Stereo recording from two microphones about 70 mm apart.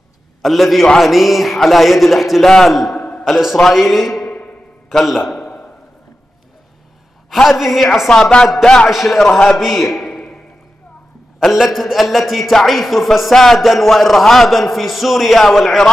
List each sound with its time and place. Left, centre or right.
0.4 s a man's voice: centre
3.0 s a sound: centre
3.3 s a man's voice: centre
5.4 s a sound: left
7.4 s a man's voice: centre
8.1 s a man's voice: centre
11.3 s a man's voice: centre